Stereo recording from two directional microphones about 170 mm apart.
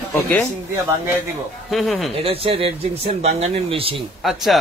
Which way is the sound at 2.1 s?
35° right (ahead or behind).